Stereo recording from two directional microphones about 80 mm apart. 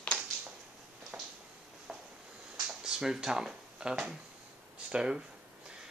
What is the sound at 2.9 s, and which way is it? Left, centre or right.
Speech, centre.